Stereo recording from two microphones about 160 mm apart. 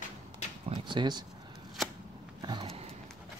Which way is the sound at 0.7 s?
30° right (ahead or behind).